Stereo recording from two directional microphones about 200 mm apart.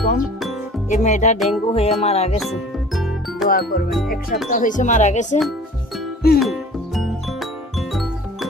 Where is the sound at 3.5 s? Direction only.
50° left (ahead or behind).